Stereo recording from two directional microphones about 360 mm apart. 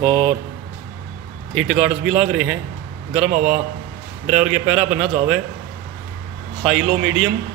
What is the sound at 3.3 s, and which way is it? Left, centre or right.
Speech, right.